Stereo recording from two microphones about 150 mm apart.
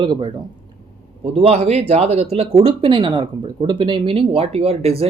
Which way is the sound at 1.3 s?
45° right (ahead or behind).